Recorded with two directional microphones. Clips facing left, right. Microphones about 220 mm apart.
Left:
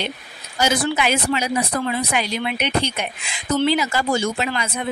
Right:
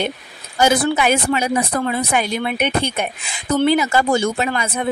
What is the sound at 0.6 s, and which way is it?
A woman's voice, 55° right (ahead or behind).